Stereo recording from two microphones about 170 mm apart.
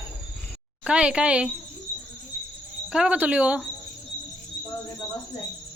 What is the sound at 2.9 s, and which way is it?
Speech, 5° right (ahead or behind).